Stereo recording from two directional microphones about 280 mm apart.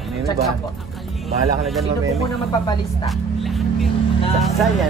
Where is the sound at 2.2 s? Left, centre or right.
Centre.